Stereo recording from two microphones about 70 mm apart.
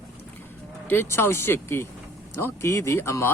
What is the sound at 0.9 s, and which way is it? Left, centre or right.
Speech, left.